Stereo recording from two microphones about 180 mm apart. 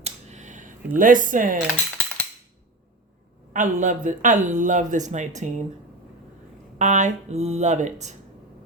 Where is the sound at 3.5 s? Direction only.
45° right (ahead or behind).